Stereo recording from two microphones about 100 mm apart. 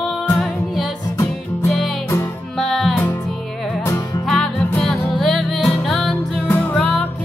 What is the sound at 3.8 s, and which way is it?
Music, 25° left (ahead or behind).